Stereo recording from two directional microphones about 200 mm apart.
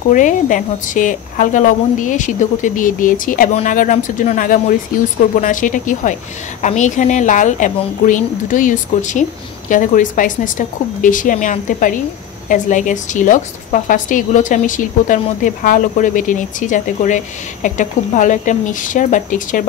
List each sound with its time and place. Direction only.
0.1 s a woman's voice: 40° left (ahead or behind)